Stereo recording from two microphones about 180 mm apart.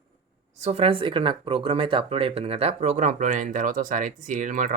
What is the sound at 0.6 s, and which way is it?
Speech, 35° right (ahead or behind).